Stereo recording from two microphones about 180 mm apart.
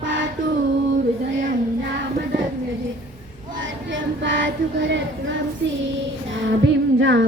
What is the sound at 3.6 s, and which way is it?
Child singing, 90° right.